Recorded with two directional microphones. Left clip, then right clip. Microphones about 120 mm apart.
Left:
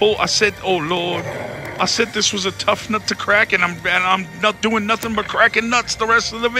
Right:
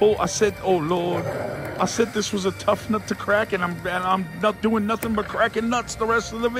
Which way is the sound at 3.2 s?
30° left (ahead or behind).